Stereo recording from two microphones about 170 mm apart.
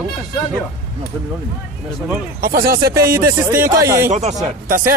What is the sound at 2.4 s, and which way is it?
Speech, 60° right (ahead or behind).